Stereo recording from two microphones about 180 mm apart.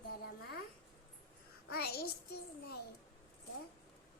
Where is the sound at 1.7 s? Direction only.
60° left (ahead or behind).